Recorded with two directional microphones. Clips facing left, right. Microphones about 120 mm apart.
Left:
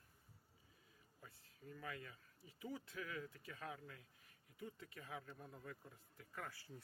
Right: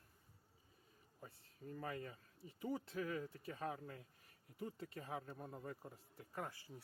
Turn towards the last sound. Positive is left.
turn(degrees=-20)  # may be behind; listen again after turning